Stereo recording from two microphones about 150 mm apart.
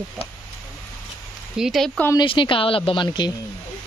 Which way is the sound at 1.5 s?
Centre (ahead or behind).